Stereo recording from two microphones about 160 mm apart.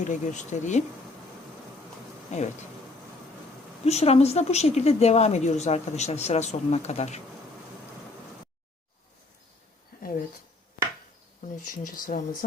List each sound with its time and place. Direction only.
0.0 s a woman's voice: 50° left (ahead or behind)
2.3 s a woman's voice: 45° left (ahead or behind)
3.8 s a woman's voice: 40° left (ahead or behind)
11.7 s speech: 60° left (ahead or behind)